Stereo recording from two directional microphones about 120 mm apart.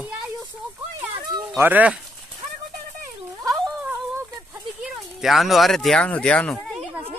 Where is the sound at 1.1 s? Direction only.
45° right (ahead or behind).